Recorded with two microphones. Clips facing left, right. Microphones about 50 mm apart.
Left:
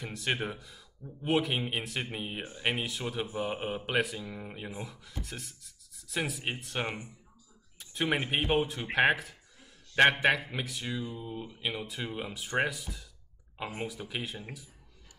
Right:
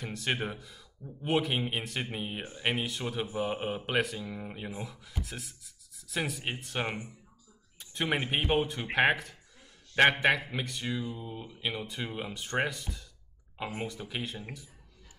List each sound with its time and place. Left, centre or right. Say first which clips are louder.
0.0 s speech: even; centre